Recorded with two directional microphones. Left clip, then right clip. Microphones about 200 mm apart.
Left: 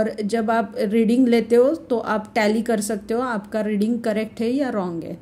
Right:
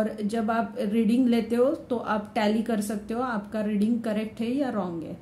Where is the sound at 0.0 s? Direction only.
40° left (ahead or behind).